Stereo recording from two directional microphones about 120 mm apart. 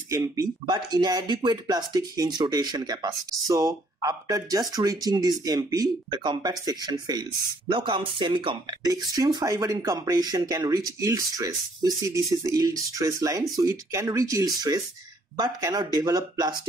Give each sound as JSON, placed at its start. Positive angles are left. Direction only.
{"t": 0.1, "sound": "speech", "side_deg": -25}
{"t": 7.7, "sound": "speech", "side_deg": -45}